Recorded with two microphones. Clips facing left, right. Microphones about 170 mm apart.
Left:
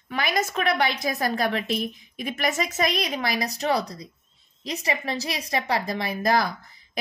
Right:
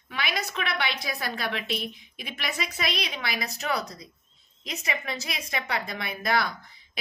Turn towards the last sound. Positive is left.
turn(degrees=40)  # may be behind; listen again after turning